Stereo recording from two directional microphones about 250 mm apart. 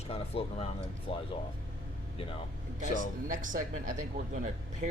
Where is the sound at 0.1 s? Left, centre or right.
Left.